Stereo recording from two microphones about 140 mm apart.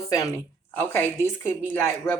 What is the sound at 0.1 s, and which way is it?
A woman's voice, 20° left (ahead or behind).